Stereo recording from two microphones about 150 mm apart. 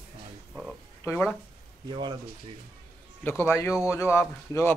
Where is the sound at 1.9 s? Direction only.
30° right (ahead or behind).